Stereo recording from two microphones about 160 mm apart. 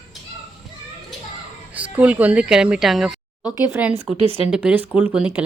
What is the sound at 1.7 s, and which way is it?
A woman's voice, 10° right (ahead or behind).